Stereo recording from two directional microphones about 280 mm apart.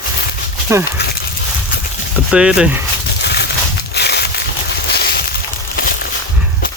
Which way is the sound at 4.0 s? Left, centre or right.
Left.